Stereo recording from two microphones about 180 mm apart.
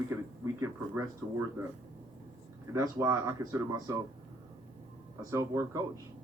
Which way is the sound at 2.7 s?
15° right (ahead or behind).